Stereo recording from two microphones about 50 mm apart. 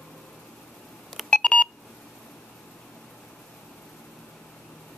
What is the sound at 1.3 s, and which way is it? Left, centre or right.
Beep, left.